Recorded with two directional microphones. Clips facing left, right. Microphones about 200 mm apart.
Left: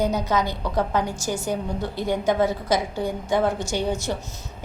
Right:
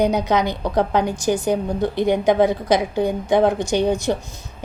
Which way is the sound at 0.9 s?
15° right (ahead or behind).